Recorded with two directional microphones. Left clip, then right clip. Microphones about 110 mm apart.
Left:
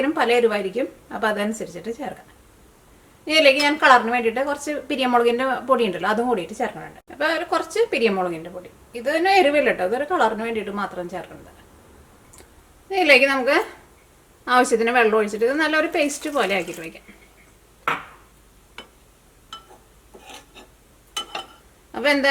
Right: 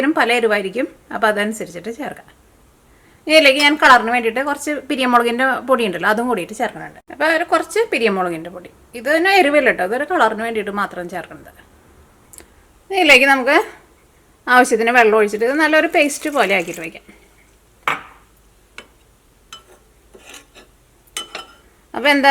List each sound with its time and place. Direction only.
0.0 s a woman's voice: 40° right (ahead or behind)
3.2 s a woman's voice: 40° right (ahead or behind)
12.9 s a woman's voice: 40° right (ahead or behind)
18.8 s a sound: 5° right (ahead or behind)
20.1 s filing: 5° right (ahead or behind)
21.1 s a sound: 5° right (ahead or behind)
21.9 s a woman's voice: 35° right (ahead or behind)